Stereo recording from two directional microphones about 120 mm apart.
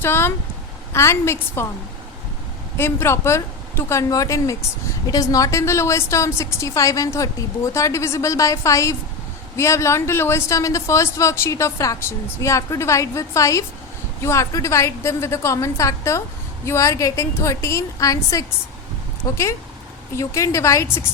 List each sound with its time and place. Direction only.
0.0 s a woman's voice: 20° left (ahead or behind)
2.7 s a woman's voice: 20° left (ahead or behind)